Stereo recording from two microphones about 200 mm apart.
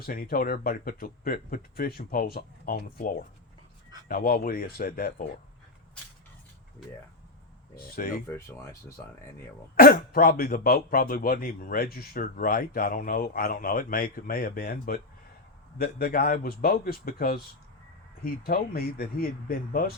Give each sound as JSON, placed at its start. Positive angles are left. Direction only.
{"t": 0.0, "sound": "speech", "side_deg": 45}
{"t": 7.8, "sound": "speech", "side_deg": 45}
{"t": 9.0, "sound": "speech", "side_deg": 15}
{"t": 9.7, "sound": "speech", "side_deg": 45}
{"t": 18.4, "sound": "speech", "side_deg": 50}